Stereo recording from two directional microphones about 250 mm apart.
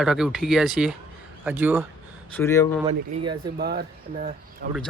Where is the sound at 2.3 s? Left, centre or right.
Centre.